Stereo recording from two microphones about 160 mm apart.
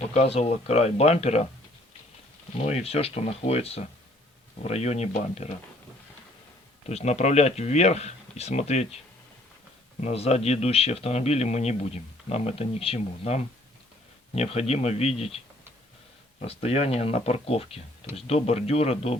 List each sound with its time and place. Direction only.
0.1 s speech: 40° left (ahead or behind)
2.6 s speech: 40° left (ahead or behind)
6.8 s speech: 45° left (ahead or behind)
10.0 s speech: 40° left (ahead or behind)
16.4 s speech: 40° left (ahead or behind)